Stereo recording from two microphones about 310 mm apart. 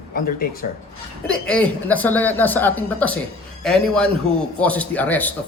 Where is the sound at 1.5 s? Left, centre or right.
Centre.